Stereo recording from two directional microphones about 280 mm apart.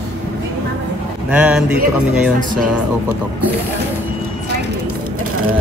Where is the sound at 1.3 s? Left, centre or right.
Centre.